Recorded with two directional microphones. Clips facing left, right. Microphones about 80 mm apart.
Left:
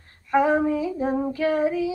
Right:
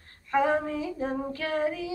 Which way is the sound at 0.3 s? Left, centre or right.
Centre.